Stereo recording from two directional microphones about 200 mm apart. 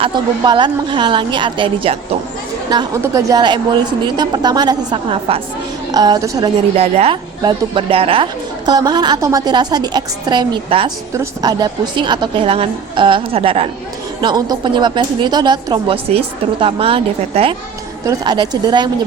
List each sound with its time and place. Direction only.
0.0 s a woman's voice: 25° right (ahead or behind)
6.7 s a woman's voice: 30° right (ahead or behind)